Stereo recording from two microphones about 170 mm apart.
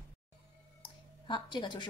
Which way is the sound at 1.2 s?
25° left (ahead or behind).